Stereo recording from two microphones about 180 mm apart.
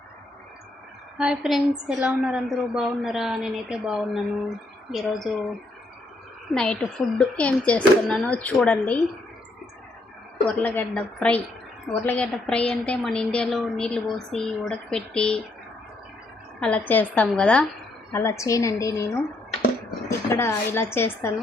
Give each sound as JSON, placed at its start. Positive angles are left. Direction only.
{"t": 1.2, "sound": "a woman's voice", "side_deg": -5}
{"t": 6.5, "sound": "a woman's voice", "side_deg": 5}
{"t": 10.6, "sound": "a woman's voice", "side_deg": 10}
{"t": 16.6, "sound": "speech", "side_deg": 5}